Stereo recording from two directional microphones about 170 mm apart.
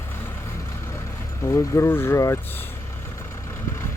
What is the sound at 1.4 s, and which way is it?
Speech, 15° left (ahead or behind).